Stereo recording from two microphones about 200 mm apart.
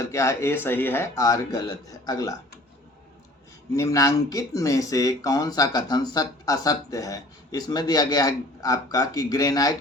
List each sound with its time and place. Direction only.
0.0 s speech: 15° left (ahead or behind)
3.8 s speech: 15° left (ahead or behind)